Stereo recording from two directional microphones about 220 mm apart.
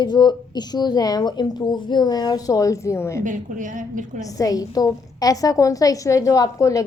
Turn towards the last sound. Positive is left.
turn(degrees=15)  # may be behind; listen again after turning